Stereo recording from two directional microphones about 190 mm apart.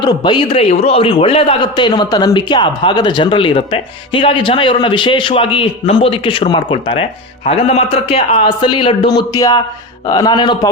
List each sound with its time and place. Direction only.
0.0 s a man's voice: 25° left (ahead or behind)